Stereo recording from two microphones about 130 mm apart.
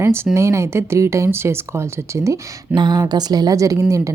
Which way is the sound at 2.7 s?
35° right (ahead or behind).